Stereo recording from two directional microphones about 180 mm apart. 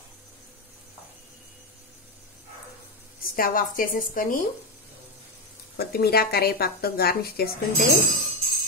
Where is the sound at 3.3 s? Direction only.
50° left (ahead or behind).